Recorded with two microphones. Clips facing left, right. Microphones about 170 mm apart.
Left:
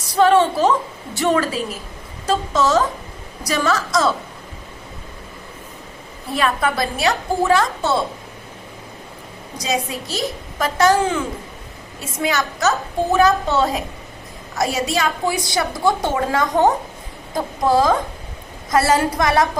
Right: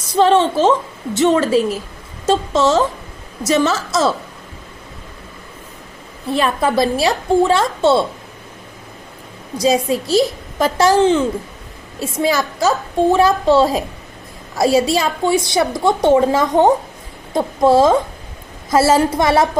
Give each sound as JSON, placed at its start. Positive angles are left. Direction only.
{"t": 0.1, "sound": "a woman's voice", "side_deg": -25}
{"t": 6.3, "sound": "a woman's voice", "side_deg": -30}
{"t": 9.6, "sound": "a woman's voice", "side_deg": -30}